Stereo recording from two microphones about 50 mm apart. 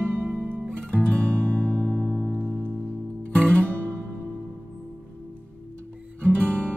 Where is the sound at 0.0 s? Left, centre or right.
Right.